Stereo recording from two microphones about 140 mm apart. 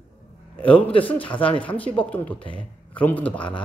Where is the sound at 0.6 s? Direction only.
40° left (ahead or behind).